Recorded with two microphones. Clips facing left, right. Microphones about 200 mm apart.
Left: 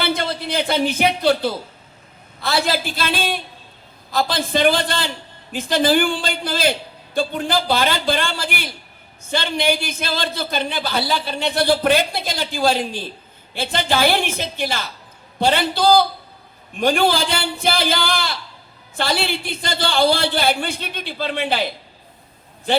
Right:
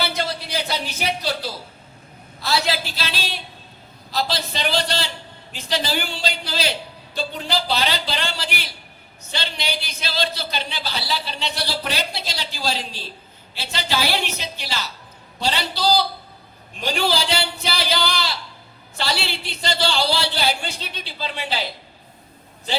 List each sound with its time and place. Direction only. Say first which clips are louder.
0.0 s a man's voice: left 3 dB; 55° left (ahead or behind)